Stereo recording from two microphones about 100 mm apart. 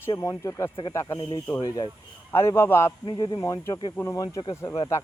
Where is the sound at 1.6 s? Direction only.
50° left (ahead or behind).